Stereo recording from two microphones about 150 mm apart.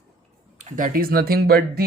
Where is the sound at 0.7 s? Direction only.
60° right (ahead or behind); by 1.9 s 90° right.